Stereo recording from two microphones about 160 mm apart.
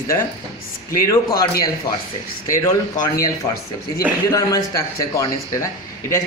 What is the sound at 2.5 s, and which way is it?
Speech, 20° left (ahead or behind).